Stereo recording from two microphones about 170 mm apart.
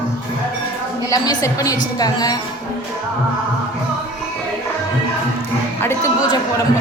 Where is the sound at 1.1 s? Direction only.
20° left (ahead or behind).